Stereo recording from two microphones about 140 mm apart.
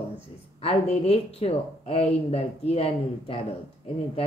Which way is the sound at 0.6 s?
45° left (ahead or behind).